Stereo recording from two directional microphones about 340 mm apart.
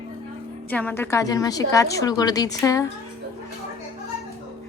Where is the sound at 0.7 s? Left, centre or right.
Centre.